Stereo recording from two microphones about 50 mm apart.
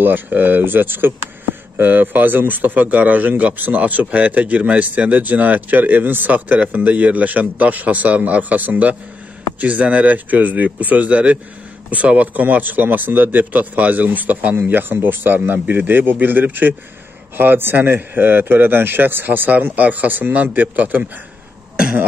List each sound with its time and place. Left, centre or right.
0.0 s a man's voice: right
19.6 s a man's voice: right